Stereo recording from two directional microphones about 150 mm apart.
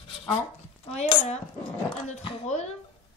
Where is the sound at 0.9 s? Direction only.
45° left (ahead or behind).